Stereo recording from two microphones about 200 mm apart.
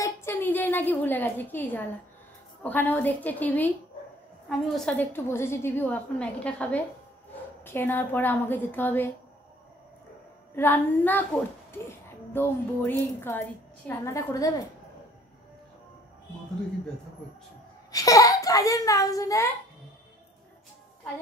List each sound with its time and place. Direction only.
0.0 s a woman's voice: 10° left (ahead or behind)
10.5 s a woman's voice: 10° left (ahead or behind)
12.3 s a woman's voice: 10° left (ahead or behind)
17.9 s a child's voice: 15° left (ahead or behind)